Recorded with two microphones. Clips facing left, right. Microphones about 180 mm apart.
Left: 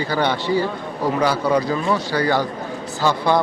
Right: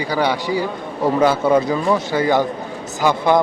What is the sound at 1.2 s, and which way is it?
Speech, 25° right (ahead or behind).